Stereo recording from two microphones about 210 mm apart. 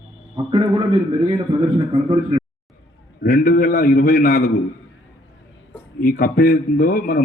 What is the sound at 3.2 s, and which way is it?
A man's voice, 40° left (ahead or behind).